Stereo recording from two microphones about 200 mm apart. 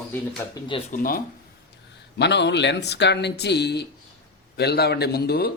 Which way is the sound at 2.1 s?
60° left (ahead or behind).